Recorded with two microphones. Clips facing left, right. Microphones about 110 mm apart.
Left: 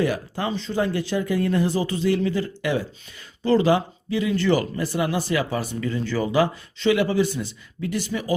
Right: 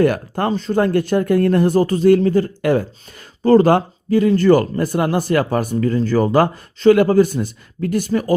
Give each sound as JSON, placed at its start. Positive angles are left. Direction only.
{"t": 0.0, "sound": "speech", "side_deg": -55}